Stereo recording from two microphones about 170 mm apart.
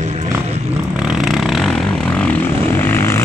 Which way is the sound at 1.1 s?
Centre (ahead or behind).